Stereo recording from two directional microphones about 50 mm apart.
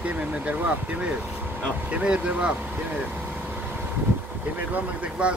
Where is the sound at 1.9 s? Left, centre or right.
Right.